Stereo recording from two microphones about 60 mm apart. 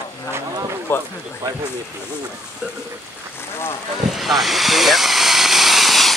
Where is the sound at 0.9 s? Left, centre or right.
Left.